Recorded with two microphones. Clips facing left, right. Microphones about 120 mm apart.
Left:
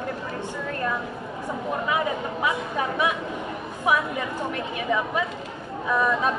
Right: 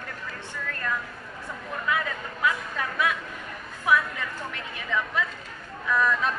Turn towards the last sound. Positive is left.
turn(degrees=15)  # may be behind; listen again after turning